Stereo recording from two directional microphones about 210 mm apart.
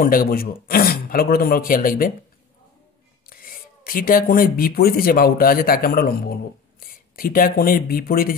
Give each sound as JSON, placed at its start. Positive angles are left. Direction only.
{"t": 0.0, "sound": "a man's voice", "side_deg": 45}
{"t": 3.3, "sound": "speech", "side_deg": 45}